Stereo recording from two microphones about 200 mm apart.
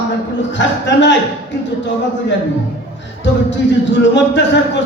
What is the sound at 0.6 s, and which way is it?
Speech, 65° left (ahead or behind).